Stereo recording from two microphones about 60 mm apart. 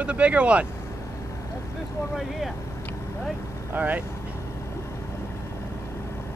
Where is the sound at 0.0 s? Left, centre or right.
Right.